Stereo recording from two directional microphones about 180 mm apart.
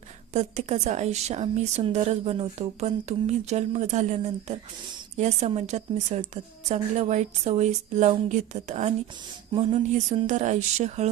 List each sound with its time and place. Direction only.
0.3 s a woman's voice: 40° right (ahead or behind)